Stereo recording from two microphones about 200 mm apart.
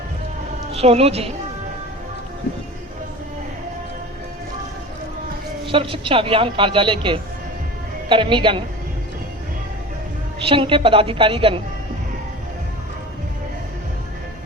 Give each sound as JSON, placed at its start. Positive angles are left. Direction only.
{"t": 0.7, "sound": "a woman's voice", "side_deg": -30}
{"t": 5.6, "sound": "speech", "side_deg": -25}
{"t": 10.4, "sound": "speech", "side_deg": -25}